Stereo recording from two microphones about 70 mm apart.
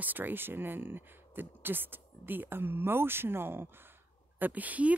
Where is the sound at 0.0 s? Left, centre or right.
Right.